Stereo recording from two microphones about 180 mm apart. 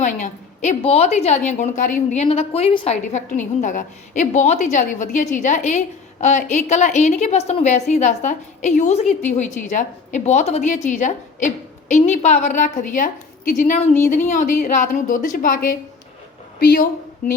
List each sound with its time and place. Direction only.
0.0 s a woman's voice: 45° left (ahead or behind)